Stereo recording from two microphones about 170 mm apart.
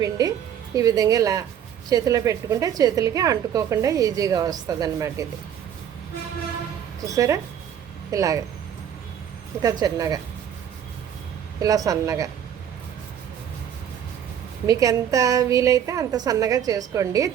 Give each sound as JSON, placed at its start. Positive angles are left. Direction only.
{"t": 0.0, "sound": "a woman's voice", "side_deg": -20}
{"t": 7.0, "sound": "a woman's voice", "side_deg": -20}
{"t": 9.6, "sound": "a woman's voice", "side_deg": -20}
{"t": 11.6, "sound": "a woman's voice", "side_deg": -20}
{"t": 14.7, "sound": "a woman's voice", "side_deg": -20}